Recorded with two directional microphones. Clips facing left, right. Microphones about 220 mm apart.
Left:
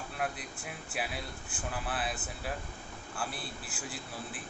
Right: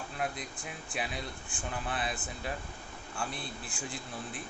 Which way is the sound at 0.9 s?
5° left (ahead or behind).